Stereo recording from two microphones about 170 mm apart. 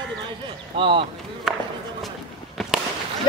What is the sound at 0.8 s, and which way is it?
Speech, 30° right (ahead or behind).